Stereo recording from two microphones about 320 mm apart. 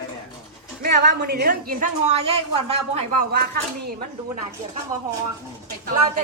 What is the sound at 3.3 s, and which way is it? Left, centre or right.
Speech, right.